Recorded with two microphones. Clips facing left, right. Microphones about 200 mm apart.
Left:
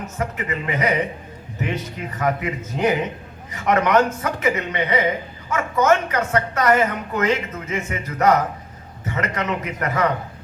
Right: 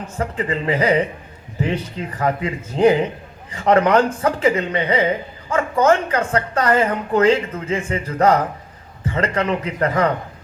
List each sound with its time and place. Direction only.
0.2 s a woman's voice: 30° right (ahead or behind)